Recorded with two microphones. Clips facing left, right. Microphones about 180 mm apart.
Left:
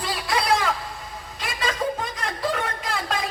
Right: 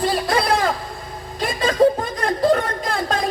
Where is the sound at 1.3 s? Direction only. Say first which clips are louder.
Right 7 dB; 40° right (ahead or behind).